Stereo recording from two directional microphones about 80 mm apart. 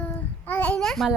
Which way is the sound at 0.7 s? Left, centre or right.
Centre.